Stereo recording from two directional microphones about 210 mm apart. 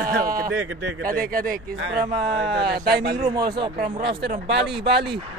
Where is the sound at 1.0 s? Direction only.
40° right (ahead or behind).